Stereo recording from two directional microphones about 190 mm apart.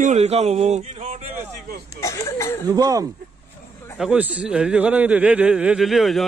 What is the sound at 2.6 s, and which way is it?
Speech, 20° right (ahead or behind).